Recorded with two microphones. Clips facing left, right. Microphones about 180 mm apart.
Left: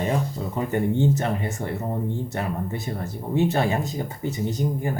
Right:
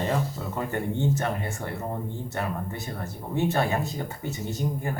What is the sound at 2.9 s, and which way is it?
Speech, 20° left (ahead or behind).